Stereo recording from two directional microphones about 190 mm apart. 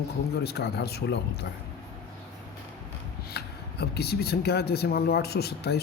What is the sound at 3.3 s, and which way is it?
Speech, 55° left (ahead or behind).